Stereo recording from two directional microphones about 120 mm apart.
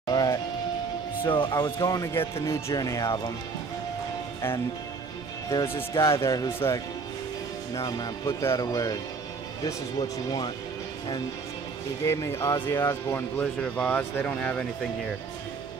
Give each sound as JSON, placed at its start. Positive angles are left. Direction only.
{"t": 0.1, "sound": "music", "side_deg": 30}
{"t": 1.2, "sound": "speech", "side_deg": 45}
{"t": 1.5, "sound": "speech", "side_deg": 30}
{"t": 5.5, "sound": "speech", "side_deg": 20}
{"t": 8.3, "sound": "speech", "side_deg": 20}
{"t": 12.0, "sound": "speech", "side_deg": 25}
{"t": 13.4, "sound": "speech", "side_deg": 10}